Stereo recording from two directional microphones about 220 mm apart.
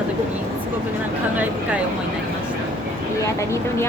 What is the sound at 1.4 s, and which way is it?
Speech, 5° right (ahead or behind).